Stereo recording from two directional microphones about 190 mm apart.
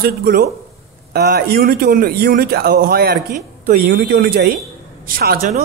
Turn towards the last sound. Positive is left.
turn(degrees=-50)  # may be behind; listen again after turning